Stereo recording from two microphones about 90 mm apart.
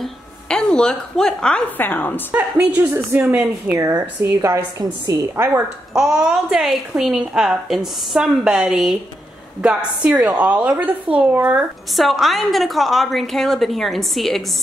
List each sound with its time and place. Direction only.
0.0 s a sound: 5° left (ahead or behind)
1.8 s a woman's voice: 20° left (ahead or behind)
2.3 s a woman's voice: 15° right (ahead or behind)
4.2 s a woman's voice: 30° right (ahead or behind)
5.9 s a woman's voice: 10° right (ahead or behind)
11.9 s a woman's voice: centre (ahead or behind)